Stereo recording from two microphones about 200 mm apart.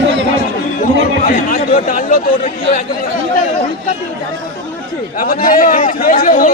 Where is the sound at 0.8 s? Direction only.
45° left (ahead or behind).